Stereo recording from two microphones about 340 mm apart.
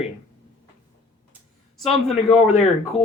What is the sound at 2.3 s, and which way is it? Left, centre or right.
Speech, centre.